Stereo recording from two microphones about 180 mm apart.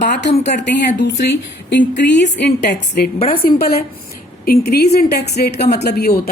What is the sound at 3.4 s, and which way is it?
A woman's voice, 55° left (ahead or behind).